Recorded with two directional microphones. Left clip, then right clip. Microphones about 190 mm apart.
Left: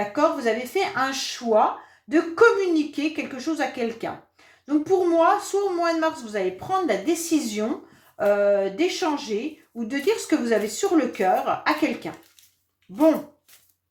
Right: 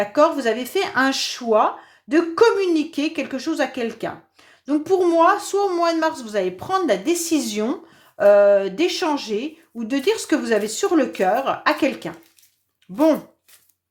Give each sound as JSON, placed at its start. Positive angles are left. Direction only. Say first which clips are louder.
{"t": 0.1, "sound": "a woman's voice", "louder": "right 4 dB", "side_deg": -45}